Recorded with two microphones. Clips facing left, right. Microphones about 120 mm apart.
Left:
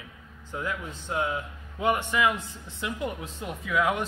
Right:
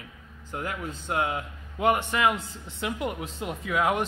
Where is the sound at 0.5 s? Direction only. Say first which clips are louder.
Even; 65° right (ahead or behind).